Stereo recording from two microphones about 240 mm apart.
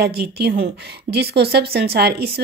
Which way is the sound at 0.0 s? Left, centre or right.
Right.